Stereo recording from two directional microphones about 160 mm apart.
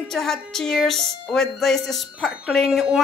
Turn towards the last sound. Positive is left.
turn(degrees=0)  # may be behind; listen again after turning